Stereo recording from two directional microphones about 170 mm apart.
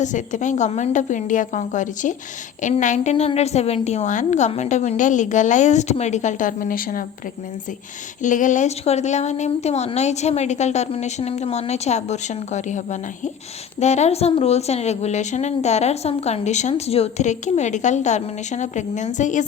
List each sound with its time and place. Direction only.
0.0 s a woman's voice: 45° left (ahead or behind)
8.2 s a woman's voice: 50° left (ahead or behind)